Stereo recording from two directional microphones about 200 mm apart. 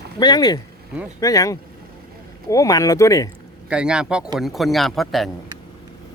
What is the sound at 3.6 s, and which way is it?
A man's voice, 5° right (ahead or behind).